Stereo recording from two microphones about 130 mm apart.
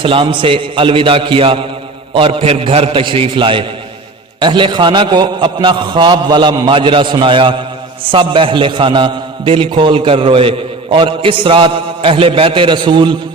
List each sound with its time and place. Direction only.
0.0 s a man's voice: 40° right (ahead or behind)